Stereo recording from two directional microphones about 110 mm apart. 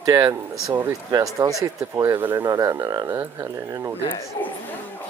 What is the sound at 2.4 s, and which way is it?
Speech, 30° right (ahead or behind).